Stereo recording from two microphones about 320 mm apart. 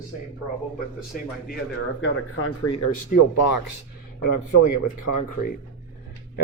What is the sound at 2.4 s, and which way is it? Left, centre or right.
Speech, left.